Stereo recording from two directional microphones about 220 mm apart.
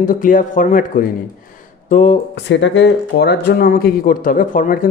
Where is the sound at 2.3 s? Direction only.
55° left (ahead or behind).